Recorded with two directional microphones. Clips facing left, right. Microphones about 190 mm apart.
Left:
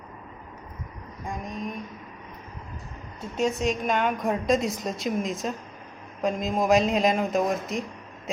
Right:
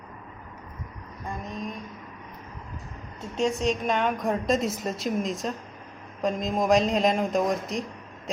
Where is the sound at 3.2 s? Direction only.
Centre (ahead or behind).